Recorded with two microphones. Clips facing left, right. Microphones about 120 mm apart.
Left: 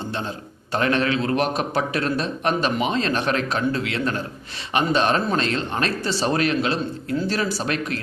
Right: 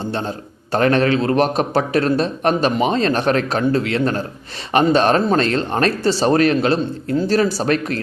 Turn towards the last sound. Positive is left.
turn(degrees=-40)  # may be behind; listen again after turning